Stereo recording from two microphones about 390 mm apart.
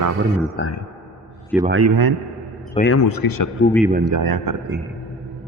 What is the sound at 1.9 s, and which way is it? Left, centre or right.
Speech, right.